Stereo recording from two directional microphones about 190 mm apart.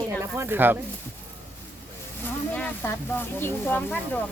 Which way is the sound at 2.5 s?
10° left (ahead or behind).